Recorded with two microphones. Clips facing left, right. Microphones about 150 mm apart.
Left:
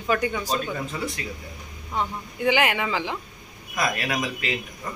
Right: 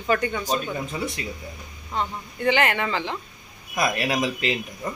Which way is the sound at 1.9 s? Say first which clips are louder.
Even; 10° left (ahead or behind).